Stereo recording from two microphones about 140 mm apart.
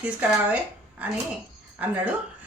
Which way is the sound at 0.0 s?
10° right (ahead or behind).